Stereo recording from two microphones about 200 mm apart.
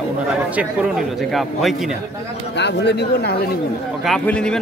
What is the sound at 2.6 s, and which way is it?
Speech, 60° left (ahead or behind).